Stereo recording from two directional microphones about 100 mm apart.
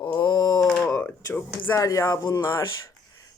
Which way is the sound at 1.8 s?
35° left (ahead or behind).